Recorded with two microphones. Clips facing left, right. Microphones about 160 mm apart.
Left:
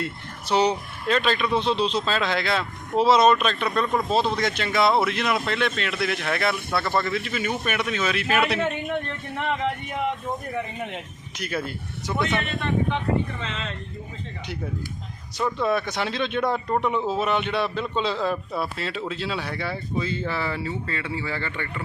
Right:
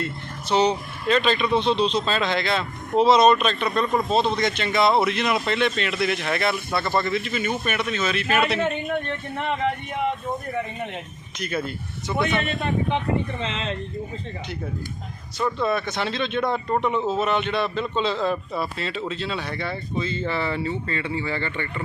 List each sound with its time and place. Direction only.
0.0 s speech: 10° left (ahead or behind)
10.9 s speech: 5° left (ahead or behind)
13.4 s speech: 30° right (ahead or behind)
15.5 s speech: 10° left (ahead or behind)